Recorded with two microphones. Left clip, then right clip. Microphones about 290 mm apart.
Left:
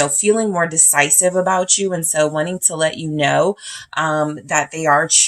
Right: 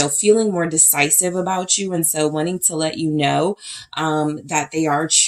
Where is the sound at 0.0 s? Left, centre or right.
Left.